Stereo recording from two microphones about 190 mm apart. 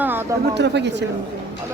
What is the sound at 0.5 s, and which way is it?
Speech, 65° right (ahead or behind).